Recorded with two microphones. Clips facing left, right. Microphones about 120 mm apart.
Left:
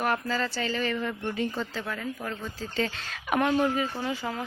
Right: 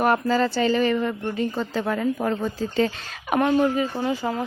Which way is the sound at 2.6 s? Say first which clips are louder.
Right 8 dB; 15° right (ahead or behind).